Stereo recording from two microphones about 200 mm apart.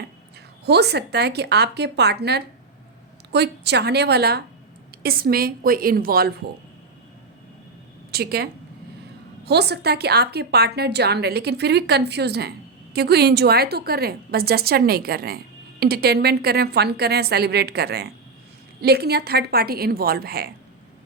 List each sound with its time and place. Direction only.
0.6 s a woman's voice: 55° right (ahead or behind)
8.1 s a woman's voice: 50° right (ahead or behind)
9.5 s a woman's voice: 55° right (ahead or behind)